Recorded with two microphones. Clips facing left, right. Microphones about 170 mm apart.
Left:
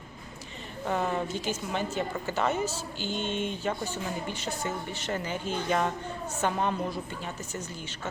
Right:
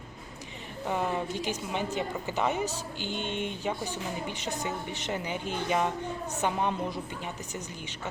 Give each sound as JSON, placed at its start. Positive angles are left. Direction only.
{"t": 0.9, "sound": "a woman's voice", "side_deg": -10}